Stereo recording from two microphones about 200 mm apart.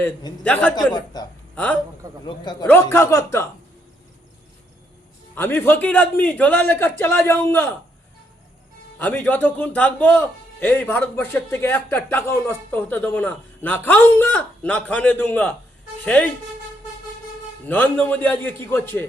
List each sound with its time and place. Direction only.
0.0 s a man's voice: 20° left (ahead or behind)
0.4 s a man's voice: 5° left (ahead or behind)
0.9 s a man's voice: 20° left (ahead or behind)
1.5 s a man's voice: 5° left (ahead or behind)
2.2 s a man's voice: 20° left (ahead or behind)
5.3 s a man's voice: 10° left (ahead or behind)
9.0 s a man's voice: 10° left (ahead or behind)
17.7 s a man's voice: 10° left (ahead or behind)